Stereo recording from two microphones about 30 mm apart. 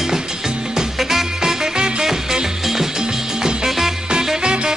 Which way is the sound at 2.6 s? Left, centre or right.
Centre.